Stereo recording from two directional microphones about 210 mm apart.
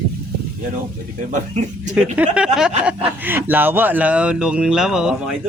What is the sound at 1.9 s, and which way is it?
Speech, 5° right (ahead or behind).